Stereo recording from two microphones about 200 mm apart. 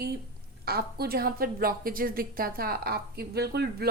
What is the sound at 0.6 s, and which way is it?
A woman's voice, 50° right (ahead or behind).